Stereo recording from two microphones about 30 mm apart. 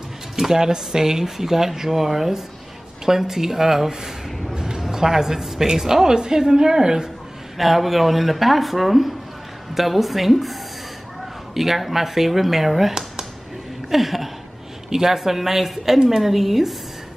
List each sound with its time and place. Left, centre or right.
0.4 s a woman's voice: centre
7.5 s speech: centre